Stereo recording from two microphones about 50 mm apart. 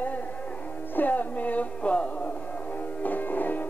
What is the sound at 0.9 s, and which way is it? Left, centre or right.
Music, left.